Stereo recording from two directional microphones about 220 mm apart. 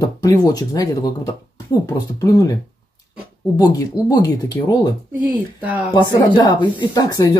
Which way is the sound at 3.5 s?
15° left (ahead or behind).